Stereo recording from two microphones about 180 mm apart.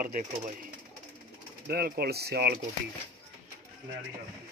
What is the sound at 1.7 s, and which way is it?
Speech, 60° right (ahead or behind).